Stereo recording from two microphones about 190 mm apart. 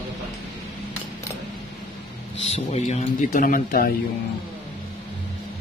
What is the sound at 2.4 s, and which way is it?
Speech, 35° left (ahead or behind).